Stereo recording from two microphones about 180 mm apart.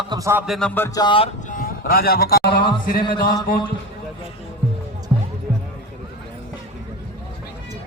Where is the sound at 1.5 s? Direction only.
50° left (ahead or behind).